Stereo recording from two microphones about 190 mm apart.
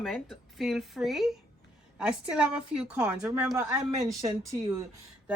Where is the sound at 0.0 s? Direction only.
Centre (ahead or behind); by 4.8 s 20° right (ahead or behind).